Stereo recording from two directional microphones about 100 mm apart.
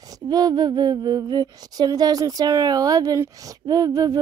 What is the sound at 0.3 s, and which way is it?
A woman's voice, 40° right (ahead or behind).